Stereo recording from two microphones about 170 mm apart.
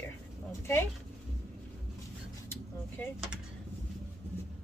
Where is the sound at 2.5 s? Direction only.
15° left (ahead or behind).